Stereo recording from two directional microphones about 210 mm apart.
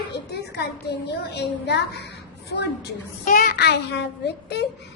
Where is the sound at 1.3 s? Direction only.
55° left (ahead or behind).